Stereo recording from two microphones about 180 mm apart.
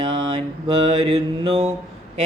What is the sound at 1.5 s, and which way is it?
Mantra, 40° right (ahead or behind).